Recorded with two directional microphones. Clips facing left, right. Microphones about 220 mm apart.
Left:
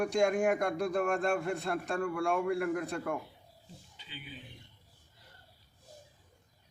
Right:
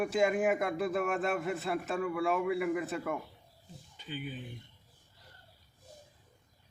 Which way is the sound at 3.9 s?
50° right (ahead or behind).